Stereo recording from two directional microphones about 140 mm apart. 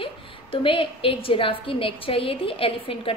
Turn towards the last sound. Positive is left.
turn(degrees=40)  # may be behind; listen again after turning